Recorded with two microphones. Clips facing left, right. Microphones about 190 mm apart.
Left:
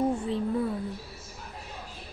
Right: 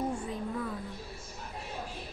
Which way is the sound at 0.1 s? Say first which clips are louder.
Left 7 dB; 30° left (ahead or behind).